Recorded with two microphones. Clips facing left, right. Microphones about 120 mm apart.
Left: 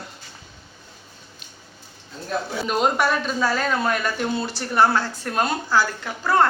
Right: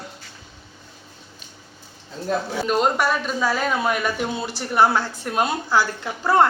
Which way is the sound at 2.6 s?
Centre (ahead or behind).